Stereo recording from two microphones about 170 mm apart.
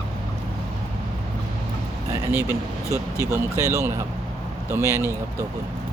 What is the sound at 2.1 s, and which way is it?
Speech, 15° right (ahead or behind).